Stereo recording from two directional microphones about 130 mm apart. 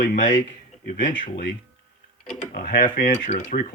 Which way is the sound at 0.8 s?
90° left.